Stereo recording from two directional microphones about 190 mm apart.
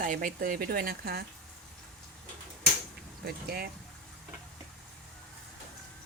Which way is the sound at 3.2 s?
55° right (ahead or behind).